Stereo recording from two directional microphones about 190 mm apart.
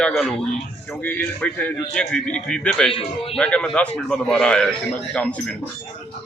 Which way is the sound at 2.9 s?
30° left (ahead or behind).